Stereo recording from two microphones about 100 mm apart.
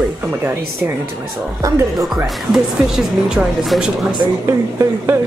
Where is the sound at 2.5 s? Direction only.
5° right (ahead or behind).